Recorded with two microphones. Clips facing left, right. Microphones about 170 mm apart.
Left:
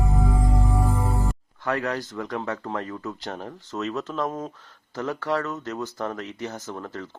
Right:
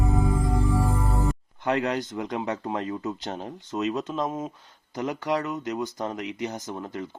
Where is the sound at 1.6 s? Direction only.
20° right (ahead or behind).